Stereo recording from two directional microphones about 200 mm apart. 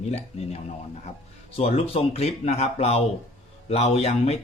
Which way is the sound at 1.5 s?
30° left (ahead or behind).